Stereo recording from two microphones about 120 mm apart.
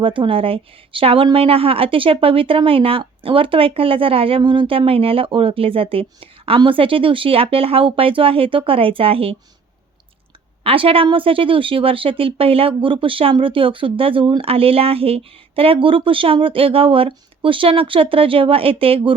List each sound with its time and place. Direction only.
0.0 s speech: 45° right (ahead or behind)
10.6 s speech: 50° right (ahead or behind)